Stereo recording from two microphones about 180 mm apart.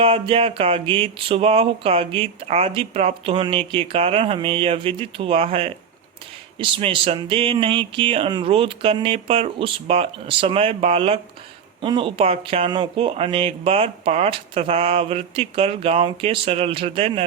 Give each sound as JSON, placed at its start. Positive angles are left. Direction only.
{"t": 0.0, "sound": "speech", "side_deg": -30}